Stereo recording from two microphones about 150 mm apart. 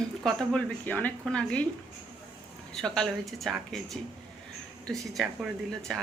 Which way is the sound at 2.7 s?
5° left (ahead or behind).